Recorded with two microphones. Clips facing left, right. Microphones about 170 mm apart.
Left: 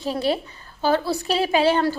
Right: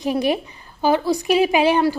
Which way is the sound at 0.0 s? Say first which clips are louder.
Right 3 dB; 15° right (ahead or behind).